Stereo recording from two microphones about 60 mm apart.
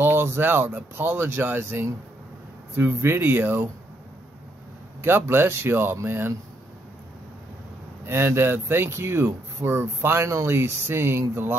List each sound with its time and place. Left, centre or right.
0.0 s speech: right
5.0 s speech: right
8.0 s speech: right